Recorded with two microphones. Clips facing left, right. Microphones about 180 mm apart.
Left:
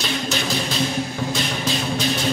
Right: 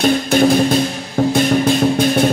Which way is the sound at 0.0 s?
55° right (ahead or behind).